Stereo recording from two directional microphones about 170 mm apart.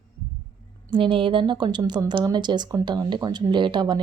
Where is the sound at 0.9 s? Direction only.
30° right (ahead or behind).